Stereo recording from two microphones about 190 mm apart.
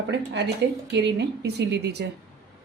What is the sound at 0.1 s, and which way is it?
Speech, 60° right (ahead or behind).